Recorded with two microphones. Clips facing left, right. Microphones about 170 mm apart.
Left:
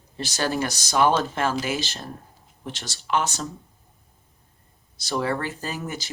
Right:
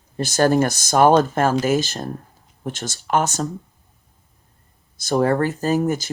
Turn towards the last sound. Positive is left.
turn(degrees=-45)  # may be behind; listen again after turning